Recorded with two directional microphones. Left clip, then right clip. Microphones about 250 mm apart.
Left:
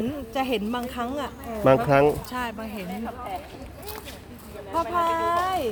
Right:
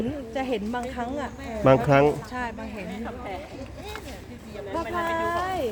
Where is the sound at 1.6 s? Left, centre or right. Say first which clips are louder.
Even; centre.